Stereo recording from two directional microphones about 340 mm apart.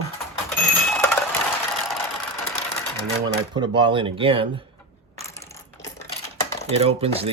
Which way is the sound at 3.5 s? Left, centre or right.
Centre.